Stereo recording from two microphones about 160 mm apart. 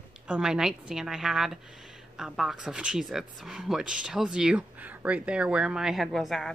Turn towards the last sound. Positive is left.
turn(degrees=0)  # may be behind; listen again after turning